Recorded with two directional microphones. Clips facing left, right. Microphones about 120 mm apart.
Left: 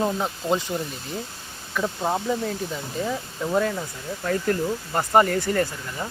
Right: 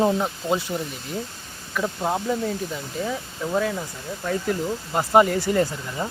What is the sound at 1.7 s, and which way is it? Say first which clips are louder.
Speech: even; centre (ahead or behind).